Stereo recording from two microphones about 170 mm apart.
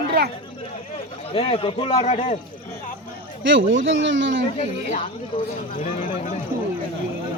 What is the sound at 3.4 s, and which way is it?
Speech, 90° right.